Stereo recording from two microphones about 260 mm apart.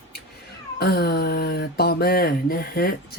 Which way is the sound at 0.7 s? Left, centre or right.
Left.